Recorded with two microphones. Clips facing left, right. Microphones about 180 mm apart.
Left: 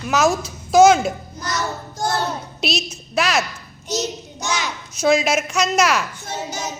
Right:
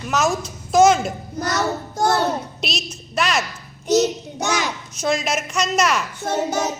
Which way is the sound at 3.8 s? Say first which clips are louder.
Right 8 dB; 60° right (ahead or behind).